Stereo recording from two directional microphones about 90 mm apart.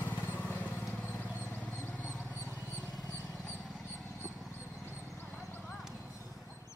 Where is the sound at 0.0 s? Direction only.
20° left (ahead or behind).